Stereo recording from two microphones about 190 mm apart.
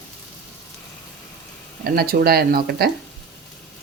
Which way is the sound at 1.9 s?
55° right (ahead or behind).